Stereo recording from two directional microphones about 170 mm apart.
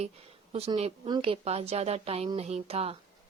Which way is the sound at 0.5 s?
35° right (ahead or behind).